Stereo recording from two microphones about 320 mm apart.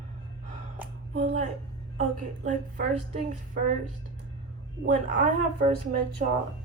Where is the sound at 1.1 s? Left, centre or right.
Right.